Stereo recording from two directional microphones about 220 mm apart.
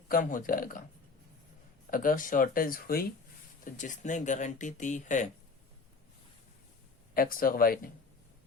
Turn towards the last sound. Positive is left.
turn(degrees=40)  # may be behind; listen again after turning